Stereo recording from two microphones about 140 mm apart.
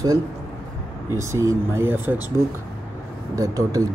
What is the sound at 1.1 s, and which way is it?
Speech, 20° right (ahead or behind).